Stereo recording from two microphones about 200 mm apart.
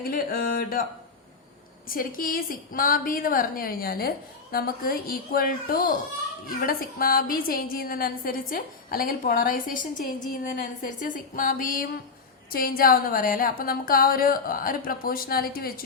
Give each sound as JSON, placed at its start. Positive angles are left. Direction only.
{"t": 0.0, "sound": "a woman's voice", "side_deg": 45}
{"t": 1.9, "sound": "a woman's voice", "side_deg": 45}